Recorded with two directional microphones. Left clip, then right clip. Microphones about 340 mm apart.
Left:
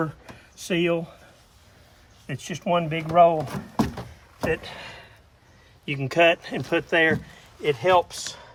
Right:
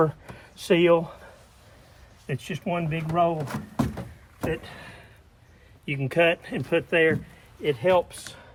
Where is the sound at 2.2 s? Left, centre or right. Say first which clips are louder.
Left 3 dB; centre.